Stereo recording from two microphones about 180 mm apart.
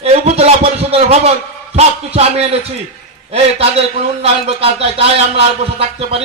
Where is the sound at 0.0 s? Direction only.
35° right (ahead or behind).